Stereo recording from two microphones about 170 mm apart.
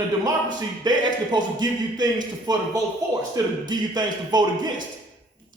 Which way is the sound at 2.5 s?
25° right (ahead or behind).